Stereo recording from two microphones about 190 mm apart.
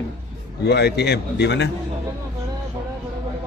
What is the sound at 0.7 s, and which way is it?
A man's voice, 60° left (ahead or behind).